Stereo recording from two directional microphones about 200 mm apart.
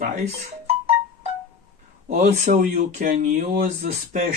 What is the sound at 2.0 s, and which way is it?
Speech, 40° right (ahead or behind).